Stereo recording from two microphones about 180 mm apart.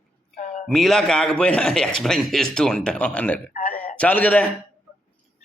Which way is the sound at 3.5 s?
50° left (ahead or behind).